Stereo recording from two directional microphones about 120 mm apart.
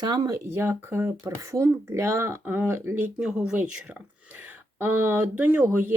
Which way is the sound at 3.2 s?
5° right (ahead or behind).